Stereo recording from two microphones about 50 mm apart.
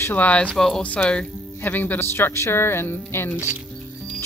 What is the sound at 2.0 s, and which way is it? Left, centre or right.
Speech, left.